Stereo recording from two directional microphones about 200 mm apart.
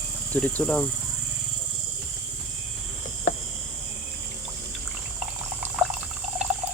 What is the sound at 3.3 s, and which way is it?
Cricket, 40° left (ahead or behind).